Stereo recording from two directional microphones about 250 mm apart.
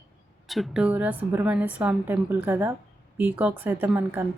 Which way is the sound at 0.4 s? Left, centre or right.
Centre.